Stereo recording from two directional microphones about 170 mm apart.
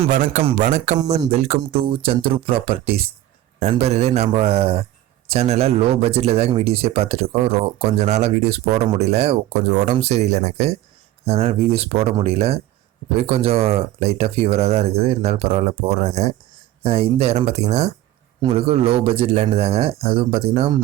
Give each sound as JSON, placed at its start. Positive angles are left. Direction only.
{"t": 0.1, "sound": "speech", "side_deg": -50}